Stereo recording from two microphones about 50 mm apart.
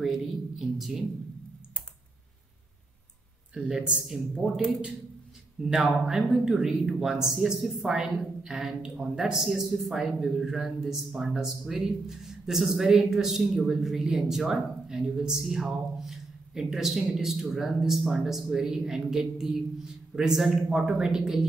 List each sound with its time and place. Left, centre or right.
0.0 s a woman's voice: centre
3.5 s speech: centre
4.4 s speech: centre
5.6 s speech: centre